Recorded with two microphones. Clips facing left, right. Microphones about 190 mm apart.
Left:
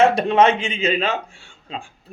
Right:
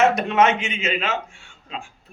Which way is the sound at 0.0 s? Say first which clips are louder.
Left 3 dB; 30° left (ahead or behind).